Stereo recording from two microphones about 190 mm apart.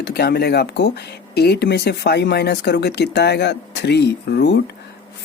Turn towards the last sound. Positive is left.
turn(degrees=60)  # may be behind; listen again after turning